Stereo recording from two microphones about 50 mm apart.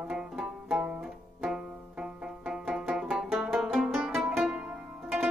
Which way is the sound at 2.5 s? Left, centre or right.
Centre.